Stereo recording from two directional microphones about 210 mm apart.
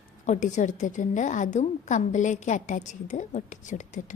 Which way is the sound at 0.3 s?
35° left (ahead or behind).